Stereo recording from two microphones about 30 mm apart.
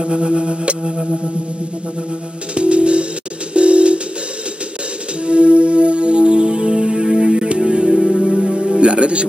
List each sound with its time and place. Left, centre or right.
0.0 s music: right
0.8 s a sound: right
2.5 s music: right
5.2 s music: right
7.9 s music: centre
8.8 s speech: right